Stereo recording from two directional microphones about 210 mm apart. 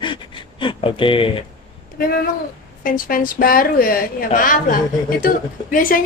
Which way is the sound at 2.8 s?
40° left (ahead or behind).